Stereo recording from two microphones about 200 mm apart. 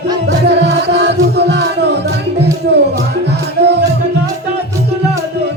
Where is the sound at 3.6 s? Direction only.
60° right (ahead or behind).